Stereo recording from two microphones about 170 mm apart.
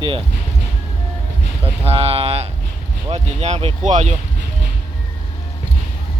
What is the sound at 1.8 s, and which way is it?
Speech, 35° right (ahead or behind).